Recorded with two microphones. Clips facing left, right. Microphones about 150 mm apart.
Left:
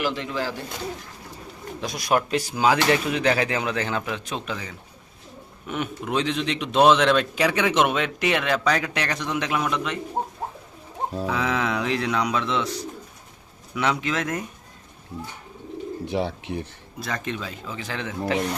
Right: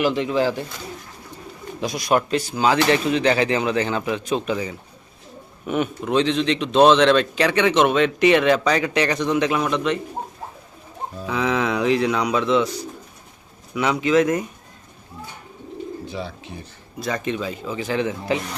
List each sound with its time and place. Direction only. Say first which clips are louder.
0.0 s speech: right 7 dB; 20° right (ahead or behind)
1.8 s speech: right 3 dB; centre (ahead or behind)
6.1 s speech: right 5 dB; 5° left (ahead or behind)
11.3 s speech: right 5 dB; centre (ahead or behind)
13.7 s speech: right 7 dB; 5° right (ahead or behind)
16.0 s speech: left 5 dB; 70° left (ahead or behind)
17.0 s speech: right 5 dB; 5° right (ahead or behind)